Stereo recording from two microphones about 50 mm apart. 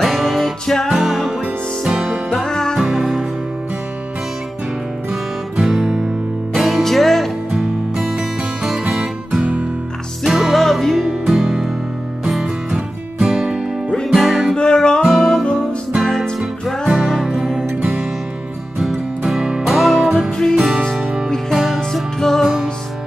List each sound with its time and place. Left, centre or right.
0.0 s music: centre
0.8 s music: centre
2.3 s music: centre
2.8 s music: centre
5.6 s music: centre
7.5 s music: centre
8.8 s music: centre
10.2 s music: centre
10.6 s music: centre
14.5 s music: centre
15.0 s music: centre
16.3 s music: centre
18.8 s music: centre